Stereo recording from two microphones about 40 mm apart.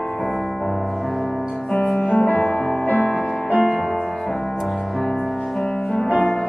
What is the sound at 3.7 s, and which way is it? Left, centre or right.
Music, centre.